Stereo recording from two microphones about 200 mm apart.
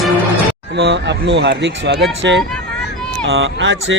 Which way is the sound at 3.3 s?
75° right (ahead or behind).